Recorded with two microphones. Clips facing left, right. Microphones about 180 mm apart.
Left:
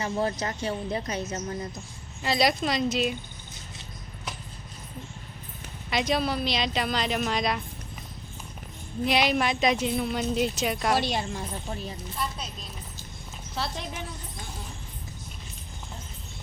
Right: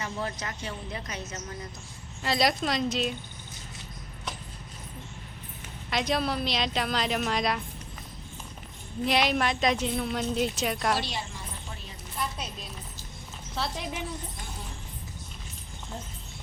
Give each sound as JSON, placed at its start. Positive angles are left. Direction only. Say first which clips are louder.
{"t": 0.0, "sound": "a woman's voice", "louder": "left 6 dB", "side_deg": 30}
{"t": 2.2, "sound": "speech", "louder": "left 2 dB", "side_deg": 0}
{"t": 5.9, "sound": "speech", "louder": "left 2 dB", "side_deg": 0}
{"t": 9.0, "sound": "speech", "louder": "left 1 dB", "side_deg": 0}
{"t": 10.9, "sound": "a woman's voice", "louder": "left 6 dB", "side_deg": 50}
{"t": 13.6, "sound": "speech", "louder": "even", "side_deg": 0}